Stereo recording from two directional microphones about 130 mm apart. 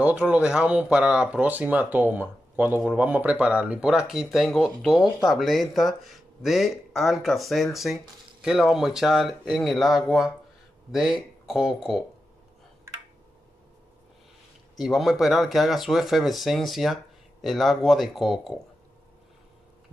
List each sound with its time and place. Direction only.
0.0 s speech: 10° right (ahead or behind)
12.9 s a sound: 20° right (ahead or behind)
14.8 s speech: 5° right (ahead or behind)